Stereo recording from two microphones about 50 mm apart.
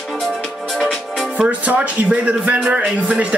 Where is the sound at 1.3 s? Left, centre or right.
Right.